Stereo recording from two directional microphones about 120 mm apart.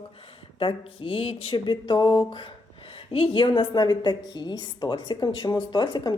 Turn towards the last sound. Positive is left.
turn(degrees=35)  # may be behind; listen again after turning